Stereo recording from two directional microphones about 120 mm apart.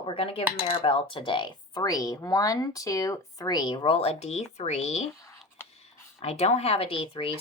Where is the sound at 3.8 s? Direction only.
55° left (ahead or behind).